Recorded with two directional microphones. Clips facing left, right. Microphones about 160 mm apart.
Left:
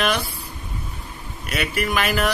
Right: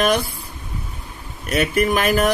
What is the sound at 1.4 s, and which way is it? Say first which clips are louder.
Speech: right 6 dB; 45° right (ahead or behind).